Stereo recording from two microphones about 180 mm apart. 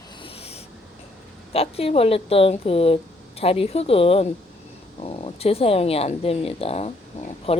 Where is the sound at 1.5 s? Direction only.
35° left (ahead or behind).